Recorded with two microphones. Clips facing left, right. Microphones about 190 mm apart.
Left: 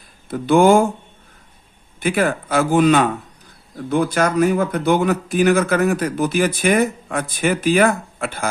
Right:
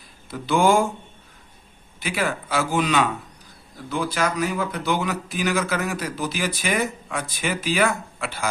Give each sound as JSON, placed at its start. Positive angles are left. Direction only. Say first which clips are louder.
{"t": 0.3, "sound": "speech", "louder": "left 6 dB", "side_deg": 50}
{"t": 2.0, "sound": "speech", "louder": "left 7 dB", "side_deg": 50}